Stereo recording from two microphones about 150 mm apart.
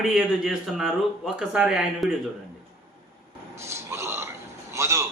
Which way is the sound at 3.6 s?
20° right (ahead or behind).